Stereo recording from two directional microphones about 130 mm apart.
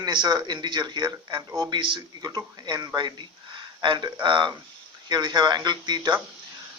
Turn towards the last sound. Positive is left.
turn(degrees=-35)  # may be behind; listen again after turning